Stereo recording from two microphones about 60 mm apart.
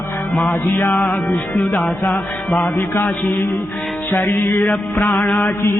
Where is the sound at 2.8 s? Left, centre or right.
Left.